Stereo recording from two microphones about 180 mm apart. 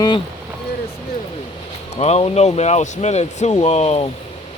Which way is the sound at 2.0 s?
35° left (ahead or behind).